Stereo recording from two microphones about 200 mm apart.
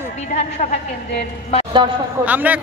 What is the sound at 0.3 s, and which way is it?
Speech, 45° left (ahead or behind).